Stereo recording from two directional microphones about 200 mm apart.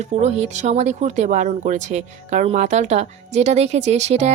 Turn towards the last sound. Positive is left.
turn(degrees=-35)  # may be behind; listen again after turning